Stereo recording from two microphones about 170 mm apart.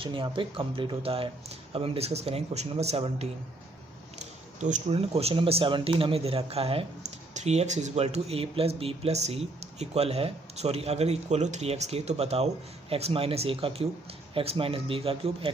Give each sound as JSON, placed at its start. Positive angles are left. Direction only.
{"t": 0.0, "sound": "a man's voice", "side_deg": -30}
{"t": 4.6, "sound": "a man's voice", "side_deg": -40}